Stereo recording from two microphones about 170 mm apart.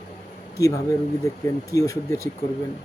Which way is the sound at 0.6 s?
20° left (ahead or behind).